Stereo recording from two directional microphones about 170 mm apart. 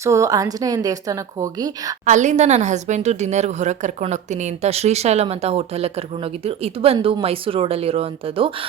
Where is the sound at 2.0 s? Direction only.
45° right (ahead or behind).